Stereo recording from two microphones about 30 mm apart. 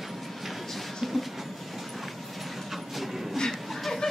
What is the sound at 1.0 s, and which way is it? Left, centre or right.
Train, centre.